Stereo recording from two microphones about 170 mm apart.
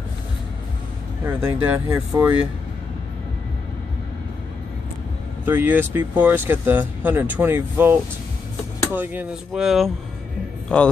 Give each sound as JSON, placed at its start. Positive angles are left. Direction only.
{"t": 1.4, "sound": "speech", "side_deg": -20}
{"t": 5.4, "sound": "speech", "side_deg": -15}